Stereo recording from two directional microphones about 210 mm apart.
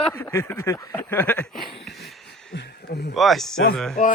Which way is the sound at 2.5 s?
55° left (ahead or behind).